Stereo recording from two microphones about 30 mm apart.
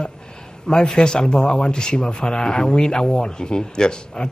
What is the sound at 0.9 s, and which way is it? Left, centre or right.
Speech, left.